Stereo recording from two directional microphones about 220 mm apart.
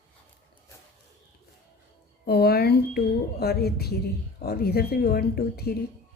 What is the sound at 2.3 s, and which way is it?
A woman's voice, 45° left (ahead or behind).